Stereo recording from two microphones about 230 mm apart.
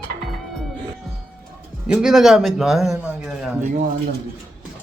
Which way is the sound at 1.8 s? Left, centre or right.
Centre.